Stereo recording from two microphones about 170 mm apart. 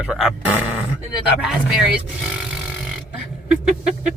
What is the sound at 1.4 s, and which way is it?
Speech, 5° right (ahead or behind).